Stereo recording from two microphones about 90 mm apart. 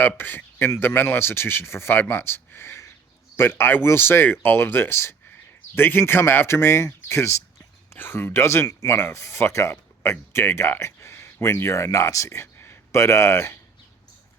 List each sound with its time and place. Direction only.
0.2 s speech: 20° left (ahead or behind)